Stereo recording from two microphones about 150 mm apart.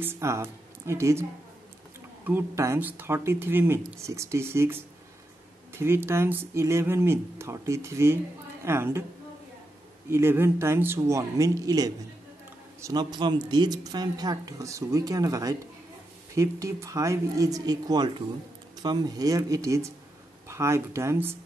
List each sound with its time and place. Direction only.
0.0 s a woman's voice: 15° right (ahead or behind)
10.0 s speech: 15° right (ahead or behind)